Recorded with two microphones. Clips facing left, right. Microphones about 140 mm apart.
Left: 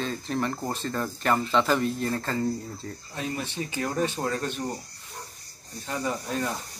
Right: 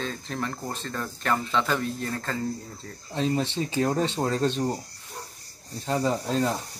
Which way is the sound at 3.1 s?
25° right (ahead or behind).